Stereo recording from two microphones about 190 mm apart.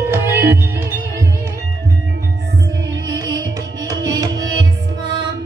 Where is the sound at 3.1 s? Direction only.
20° right (ahead or behind).